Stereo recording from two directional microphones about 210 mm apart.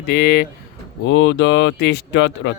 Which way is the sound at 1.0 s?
60° left (ahead or behind).